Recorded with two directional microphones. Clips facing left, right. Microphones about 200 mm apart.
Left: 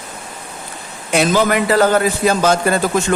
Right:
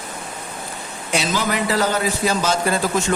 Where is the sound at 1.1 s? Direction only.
55° left (ahead or behind).